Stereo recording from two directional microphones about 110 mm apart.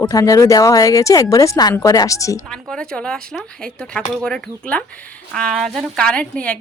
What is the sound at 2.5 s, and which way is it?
A woman's voice, 5° left (ahead or behind).